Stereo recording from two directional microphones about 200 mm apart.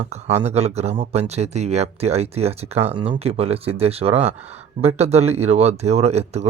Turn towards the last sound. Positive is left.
turn(degrees=-30)  # may be behind; listen again after turning